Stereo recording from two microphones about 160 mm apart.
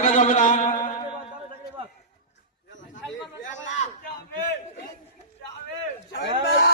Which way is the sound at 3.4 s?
50° left (ahead or behind).